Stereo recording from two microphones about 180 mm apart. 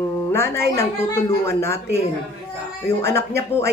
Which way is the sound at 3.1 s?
15° left (ahead or behind).